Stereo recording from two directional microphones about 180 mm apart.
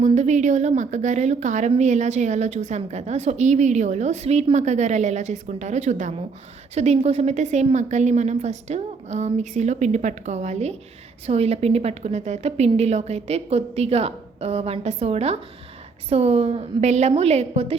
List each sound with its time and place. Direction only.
0.0 s a woman's voice: 40° right (ahead or behind)